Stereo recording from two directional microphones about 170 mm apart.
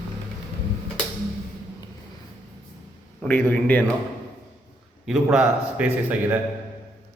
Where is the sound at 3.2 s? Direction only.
10° left (ahead or behind).